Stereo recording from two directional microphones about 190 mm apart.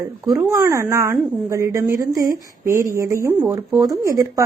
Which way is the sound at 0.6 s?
15° right (ahead or behind).